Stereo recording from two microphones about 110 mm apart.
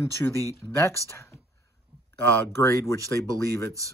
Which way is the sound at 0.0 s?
25° left (ahead or behind).